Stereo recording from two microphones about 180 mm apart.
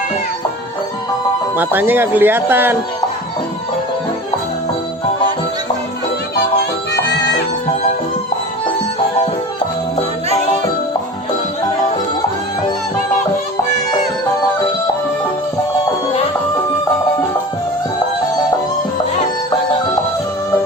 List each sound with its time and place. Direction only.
1.5 s speech: 10° right (ahead or behind)
6.3 s music: 70° left (ahead or behind)